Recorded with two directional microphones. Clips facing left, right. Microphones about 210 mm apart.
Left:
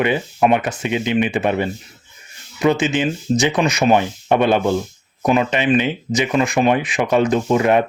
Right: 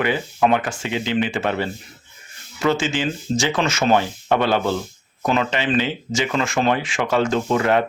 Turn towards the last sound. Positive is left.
turn(degrees=20)  # may be behind; listen again after turning